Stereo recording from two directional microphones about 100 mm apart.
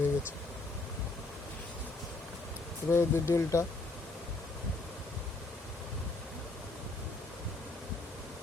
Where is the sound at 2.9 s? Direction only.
25° left (ahead or behind).